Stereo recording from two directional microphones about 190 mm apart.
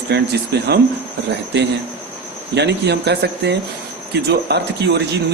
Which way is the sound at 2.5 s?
65° right (ahead or behind).